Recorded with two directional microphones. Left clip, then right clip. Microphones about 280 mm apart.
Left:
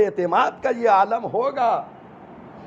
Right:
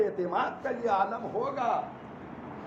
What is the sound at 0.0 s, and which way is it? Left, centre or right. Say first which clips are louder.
A man's voice: left 10 dB; left.